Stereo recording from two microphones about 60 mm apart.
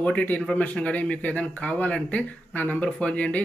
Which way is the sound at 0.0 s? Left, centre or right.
Left.